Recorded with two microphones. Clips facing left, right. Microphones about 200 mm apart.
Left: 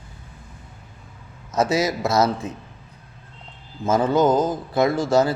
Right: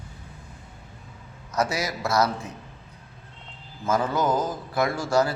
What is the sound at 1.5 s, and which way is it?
Speech, 25° left (ahead or behind).